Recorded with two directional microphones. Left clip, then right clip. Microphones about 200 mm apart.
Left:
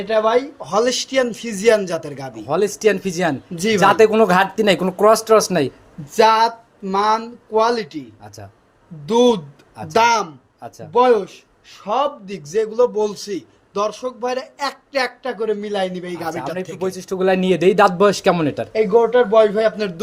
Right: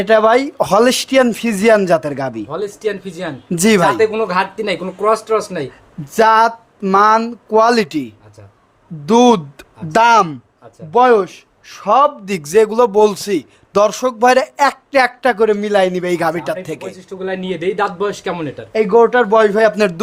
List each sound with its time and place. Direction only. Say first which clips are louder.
0.0 s a man's voice: right 6 dB; 55° right (ahead or behind)
2.5 s speech: left 4 dB; 35° left (ahead or behind)
3.5 s a man's voice: right 6 dB; 45° right (ahead or behind)
3.8 s speech: left 5 dB; 25° left (ahead or behind)
6.1 s a man's voice: right 3 dB; 40° right (ahead or behind)
9.0 s a man's voice: right 4 dB; 40° right (ahead or behind)
16.8 s speech: left 6 dB; 35° left (ahead or behind)
18.7 s a man's voice: right 4 dB; 45° right (ahead or behind)